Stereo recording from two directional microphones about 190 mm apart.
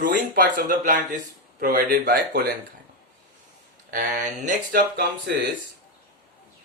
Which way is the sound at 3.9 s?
40° right (ahead or behind).